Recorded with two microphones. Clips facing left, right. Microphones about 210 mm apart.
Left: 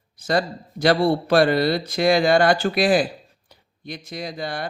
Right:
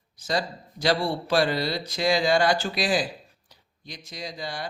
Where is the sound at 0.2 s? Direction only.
55° left (ahead or behind).